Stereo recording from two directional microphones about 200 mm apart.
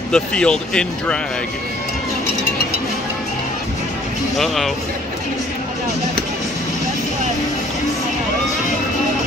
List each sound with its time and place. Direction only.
0.1 s speech: 5° left (ahead or behind)